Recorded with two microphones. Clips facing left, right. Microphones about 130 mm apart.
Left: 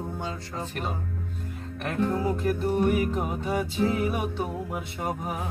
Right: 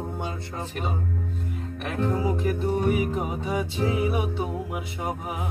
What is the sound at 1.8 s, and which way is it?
Music, 15° right (ahead or behind).